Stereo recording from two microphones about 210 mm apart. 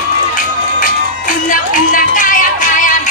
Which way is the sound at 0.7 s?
40° left (ahead or behind).